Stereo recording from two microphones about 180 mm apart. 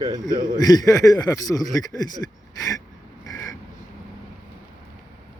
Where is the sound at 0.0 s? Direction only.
25° right (ahead or behind).